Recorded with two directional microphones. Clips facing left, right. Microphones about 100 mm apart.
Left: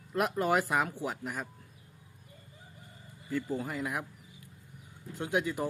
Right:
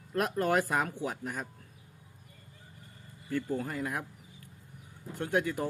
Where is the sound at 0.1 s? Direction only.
15° left (ahead or behind).